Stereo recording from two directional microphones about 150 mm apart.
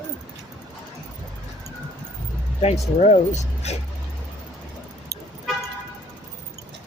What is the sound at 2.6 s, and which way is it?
Speech, 45° left (ahead or behind).